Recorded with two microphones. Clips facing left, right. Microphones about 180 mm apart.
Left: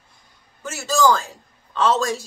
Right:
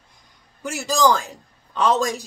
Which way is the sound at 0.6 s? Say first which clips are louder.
Even; 15° right (ahead or behind).